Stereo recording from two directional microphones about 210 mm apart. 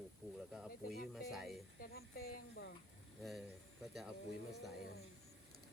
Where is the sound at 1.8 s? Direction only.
50° left (ahead or behind).